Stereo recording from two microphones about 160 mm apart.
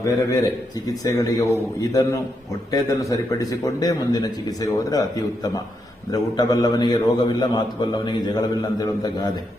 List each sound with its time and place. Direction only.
0.0 s a man's voice: 20° left (ahead or behind)